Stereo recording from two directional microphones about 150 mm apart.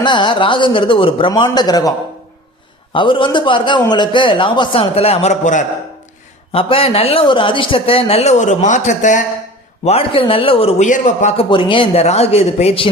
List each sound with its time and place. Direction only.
0.0 s a man's voice: 30° left (ahead or behind)
2.9 s a man's voice: 35° left (ahead or behind); by 5.6 s 55° left (ahead or behind)
6.5 s a man's voice: 40° left (ahead or behind); by 9.2 s 55° left (ahead or behind)
9.8 s a man's voice: 40° left (ahead or behind)
10.8 s a man's voice: 55° left (ahead or behind)
11.3 s a man's voice: 35° left (ahead or behind)